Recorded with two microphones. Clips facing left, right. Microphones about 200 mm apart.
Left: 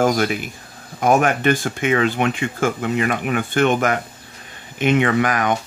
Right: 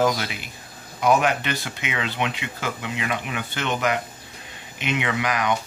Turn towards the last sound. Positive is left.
turn(degrees=50)  # may be behind; listen again after turning